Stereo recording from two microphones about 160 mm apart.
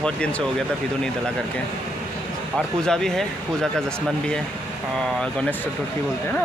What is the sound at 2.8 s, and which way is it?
Speech, 5° left (ahead or behind).